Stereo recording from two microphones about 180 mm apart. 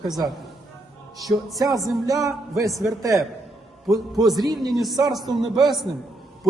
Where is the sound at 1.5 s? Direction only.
20° right (ahead or behind).